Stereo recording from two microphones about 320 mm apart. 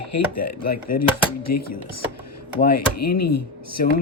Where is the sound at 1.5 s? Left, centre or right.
Left.